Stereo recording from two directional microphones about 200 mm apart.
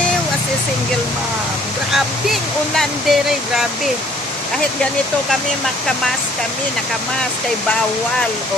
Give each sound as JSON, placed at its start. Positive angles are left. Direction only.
{"t": 2.7, "sound": "speech", "side_deg": 0}